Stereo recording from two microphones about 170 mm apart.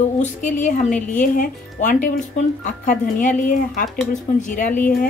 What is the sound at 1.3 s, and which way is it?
Speech, 50° left (ahead or behind).